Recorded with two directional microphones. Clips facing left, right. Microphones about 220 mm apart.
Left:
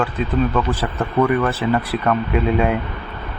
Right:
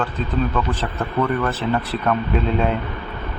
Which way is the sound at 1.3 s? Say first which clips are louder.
Left 3 dB; 5° left (ahead or behind).